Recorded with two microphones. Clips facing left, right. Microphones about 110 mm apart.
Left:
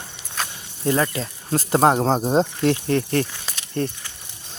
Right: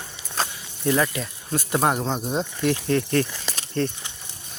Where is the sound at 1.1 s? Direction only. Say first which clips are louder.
Left 3 dB; 35° left (ahead or behind).